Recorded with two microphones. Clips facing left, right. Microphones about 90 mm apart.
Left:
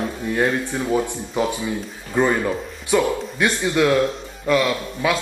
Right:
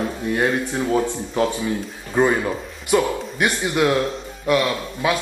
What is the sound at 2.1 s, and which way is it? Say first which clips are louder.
Speech: right 1 dB; 15° right (ahead or behind).